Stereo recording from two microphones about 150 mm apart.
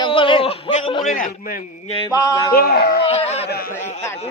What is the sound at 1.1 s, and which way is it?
Speech, 65° left (ahead or behind).